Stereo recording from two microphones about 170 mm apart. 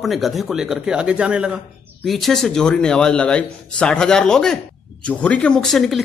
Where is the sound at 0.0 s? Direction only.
Centre (ahead or behind).